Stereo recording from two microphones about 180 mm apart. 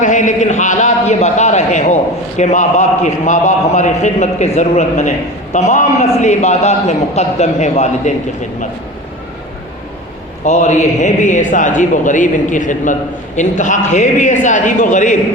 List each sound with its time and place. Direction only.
0.0 s a man's voice: 45° left (ahead or behind)
10.4 s a man's voice: 40° left (ahead or behind)